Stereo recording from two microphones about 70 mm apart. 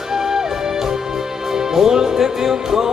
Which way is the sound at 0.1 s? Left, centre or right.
Centre.